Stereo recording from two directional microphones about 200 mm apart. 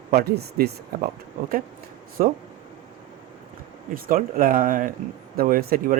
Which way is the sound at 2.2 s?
40° right (ahead or behind).